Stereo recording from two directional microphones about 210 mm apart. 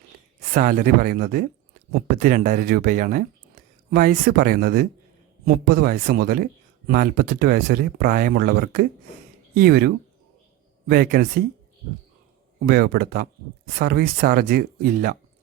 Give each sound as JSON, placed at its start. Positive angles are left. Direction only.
{"t": 0.5, "sound": "speech", "side_deg": -40}
{"t": 12.6, "sound": "speech", "side_deg": -50}